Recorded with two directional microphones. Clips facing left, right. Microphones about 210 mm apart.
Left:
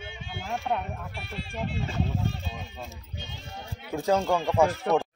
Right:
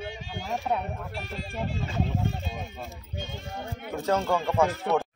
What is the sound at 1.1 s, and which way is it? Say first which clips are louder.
Speech: right 2 dB; 40° right (ahead or behind).